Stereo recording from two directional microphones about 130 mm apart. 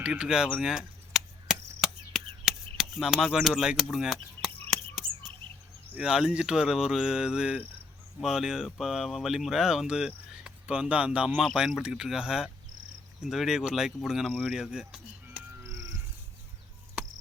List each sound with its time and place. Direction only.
0.0 s chop: 5° right (ahead or behind)
3.9 s speech: centre (ahead or behind)
5.9 s speech: 5° right (ahead or behind)
15.6 s music: 25° right (ahead or behind)
17.0 s chop: 10° right (ahead or behind)